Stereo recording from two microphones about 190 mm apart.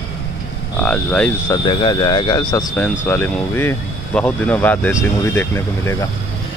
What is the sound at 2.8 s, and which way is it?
Speech, 10° left (ahead or behind).